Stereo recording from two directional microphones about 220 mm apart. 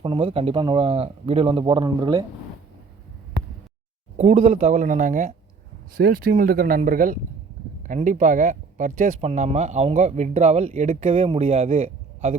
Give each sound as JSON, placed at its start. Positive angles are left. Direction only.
{"t": 0.0, "sound": "speech", "side_deg": -25}
{"t": 4.2, "sound": "speech", "side_deg": -30}